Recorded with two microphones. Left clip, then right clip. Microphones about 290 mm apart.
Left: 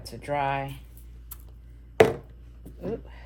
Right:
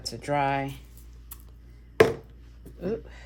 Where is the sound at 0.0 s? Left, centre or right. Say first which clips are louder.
Right 2 dB; right.